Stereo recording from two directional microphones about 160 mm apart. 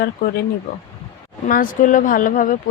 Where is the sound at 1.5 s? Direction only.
55° left (ahead or behind).